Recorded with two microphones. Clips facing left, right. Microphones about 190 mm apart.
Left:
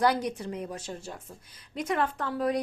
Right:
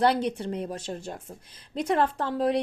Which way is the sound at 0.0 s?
30° right (ahead or behind).